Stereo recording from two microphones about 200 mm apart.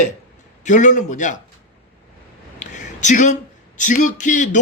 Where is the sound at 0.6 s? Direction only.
35° left (ahead or behind).